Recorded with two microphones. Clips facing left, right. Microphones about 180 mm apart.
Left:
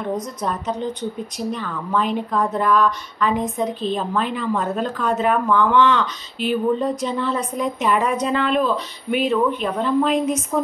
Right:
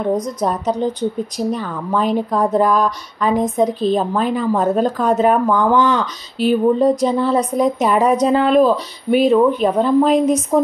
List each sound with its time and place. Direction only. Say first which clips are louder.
0.4 s speech: right 6 dB; 35° right (ahead or behind)